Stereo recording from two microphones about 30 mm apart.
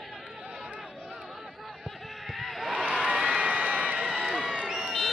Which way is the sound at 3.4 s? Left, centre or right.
Right.